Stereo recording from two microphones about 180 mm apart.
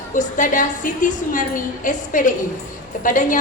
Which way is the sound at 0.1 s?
45° left (ahead or behind).